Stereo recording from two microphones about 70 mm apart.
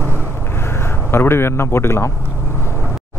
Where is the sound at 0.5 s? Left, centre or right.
Left.